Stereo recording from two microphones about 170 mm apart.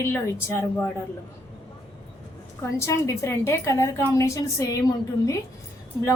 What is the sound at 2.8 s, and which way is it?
A woman's voice, 15° left (ahead or behind).